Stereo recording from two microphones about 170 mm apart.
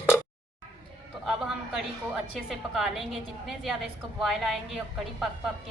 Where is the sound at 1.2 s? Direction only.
Centre (ahead or behind).